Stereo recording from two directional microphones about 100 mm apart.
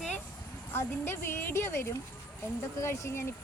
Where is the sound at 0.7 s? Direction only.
25° left (ahead or behind).